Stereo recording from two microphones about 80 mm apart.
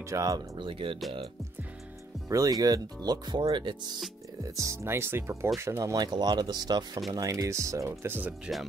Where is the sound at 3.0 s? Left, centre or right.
Right.